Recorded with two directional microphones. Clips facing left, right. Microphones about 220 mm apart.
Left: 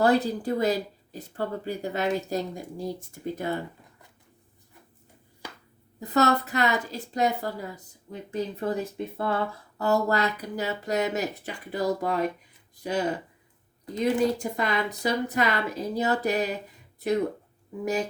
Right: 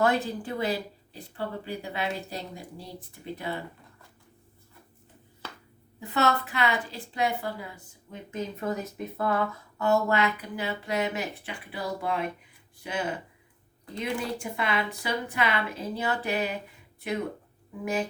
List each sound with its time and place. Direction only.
0.0 s speech: 35° left (ahead or behind)
5.4 s a sound: 15° left (ahead or behind)
6.0 s a woman's voice: 40° left (ahead or behind)